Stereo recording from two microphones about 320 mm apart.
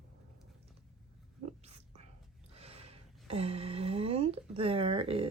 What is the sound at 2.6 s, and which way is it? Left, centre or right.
Speech, centre.